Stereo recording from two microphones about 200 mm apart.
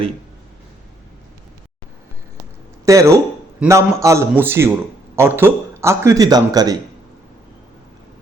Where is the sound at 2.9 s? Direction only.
15° right (ahead or behind).